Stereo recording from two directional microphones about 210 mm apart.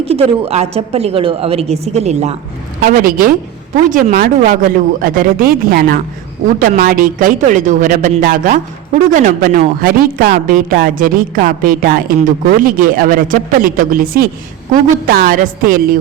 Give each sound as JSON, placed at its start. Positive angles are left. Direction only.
{"t": 0.0, "sound": "a woman's voice", "side_deg": -30}
{"t": 2.8, "sound": "a woman's voice", "side_deg": -40}